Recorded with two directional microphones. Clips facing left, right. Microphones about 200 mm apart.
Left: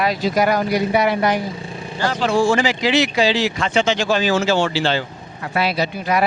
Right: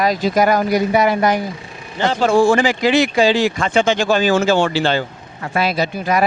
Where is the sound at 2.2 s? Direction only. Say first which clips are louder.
Right 4 dB; 50° right (ahead or behind).